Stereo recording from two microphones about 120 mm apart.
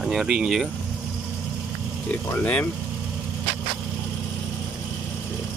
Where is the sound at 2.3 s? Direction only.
15° left (ahead or behind).